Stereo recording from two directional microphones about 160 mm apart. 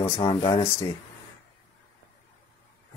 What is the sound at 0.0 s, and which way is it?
Speech, 25° left (ahead or behind).